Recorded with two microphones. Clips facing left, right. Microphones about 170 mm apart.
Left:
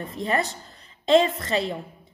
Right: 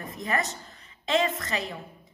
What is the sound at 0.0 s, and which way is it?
A woman's voice, 30° left (ahead or behind).